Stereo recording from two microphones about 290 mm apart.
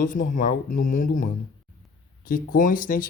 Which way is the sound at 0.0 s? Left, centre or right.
Left.